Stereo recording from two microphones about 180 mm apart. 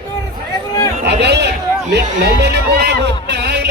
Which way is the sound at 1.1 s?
70° right (ahead or behind).